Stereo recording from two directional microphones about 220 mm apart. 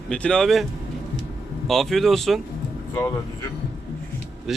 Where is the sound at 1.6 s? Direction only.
Centre (ahead or behind).